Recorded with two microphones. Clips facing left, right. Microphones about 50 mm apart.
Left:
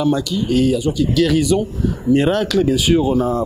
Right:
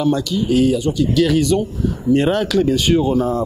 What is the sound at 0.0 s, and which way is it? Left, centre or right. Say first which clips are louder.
Speech: even; centre.